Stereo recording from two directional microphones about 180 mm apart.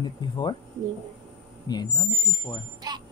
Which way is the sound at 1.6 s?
25° left (ahead or behind).